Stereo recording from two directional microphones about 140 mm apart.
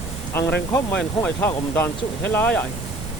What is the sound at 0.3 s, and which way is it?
Speech, 10° left (ahead or behind).